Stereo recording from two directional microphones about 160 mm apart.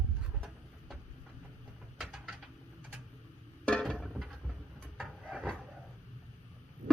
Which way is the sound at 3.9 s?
Centre (ahead or behind).